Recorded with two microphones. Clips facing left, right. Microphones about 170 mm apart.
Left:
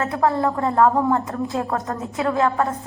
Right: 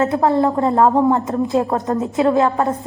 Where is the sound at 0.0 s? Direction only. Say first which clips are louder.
Right 5 dB; 25° right (ahead or behind).